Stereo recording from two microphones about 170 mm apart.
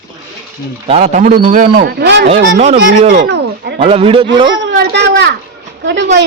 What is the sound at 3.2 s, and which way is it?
Speech, 70° right (ahead or behind).